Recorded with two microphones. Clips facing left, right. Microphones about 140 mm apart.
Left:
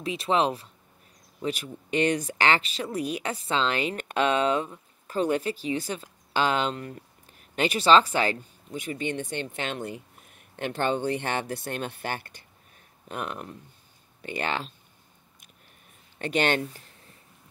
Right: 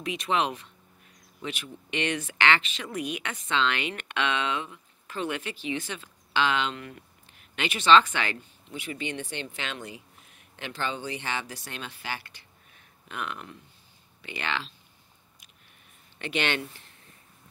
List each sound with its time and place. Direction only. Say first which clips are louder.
0.0 s speech: left 3 dB; 30° left (ahead or behind)
16.2 s speech: left 4 dB; 40° left (ahead or behind)